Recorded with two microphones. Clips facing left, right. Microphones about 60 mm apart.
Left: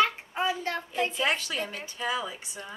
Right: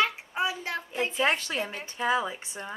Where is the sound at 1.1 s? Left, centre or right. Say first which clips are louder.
Right 2 dB; right.